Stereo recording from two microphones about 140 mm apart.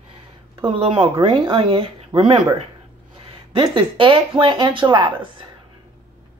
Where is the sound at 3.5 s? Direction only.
35° right (ahead or behind).